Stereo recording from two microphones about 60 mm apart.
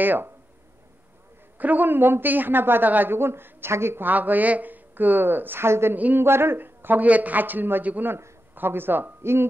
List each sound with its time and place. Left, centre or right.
0.0 s a woman's voice: right
1.6 s a woman's voice: right
4.1 s a woman's voice: right